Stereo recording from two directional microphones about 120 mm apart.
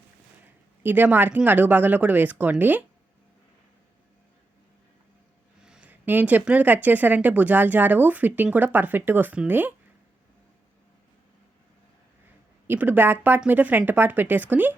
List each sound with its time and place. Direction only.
0.8 s speech: 15° right (ahead or behind)
5.6 s speech: 10° right (ahead or behind)
12.6 s speech: 15° right (ahead or behind)